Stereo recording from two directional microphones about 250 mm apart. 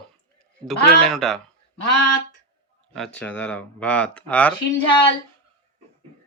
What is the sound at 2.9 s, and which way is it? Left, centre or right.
Speech, centre.